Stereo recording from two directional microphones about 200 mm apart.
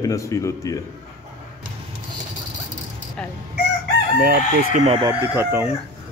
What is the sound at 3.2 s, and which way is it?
Chicken, 5° left (ahead or behind).